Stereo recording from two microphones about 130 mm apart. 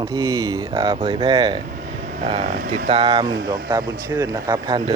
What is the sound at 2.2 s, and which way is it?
Speech, 55° right (ahead or behind).